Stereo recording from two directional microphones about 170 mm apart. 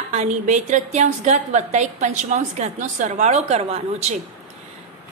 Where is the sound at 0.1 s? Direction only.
45° right (ahead or behind).